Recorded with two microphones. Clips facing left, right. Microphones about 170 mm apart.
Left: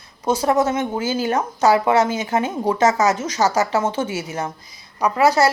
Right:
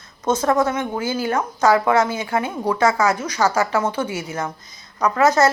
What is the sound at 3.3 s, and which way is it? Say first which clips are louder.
Speech: even; 40° left (ahead or behind).